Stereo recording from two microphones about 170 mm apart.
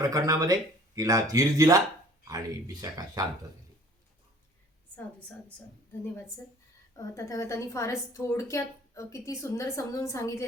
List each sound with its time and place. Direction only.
0.0 s speech: 20° right (ahead or behind)
6.9 s a woman's voice: 20° left (ahead or behind)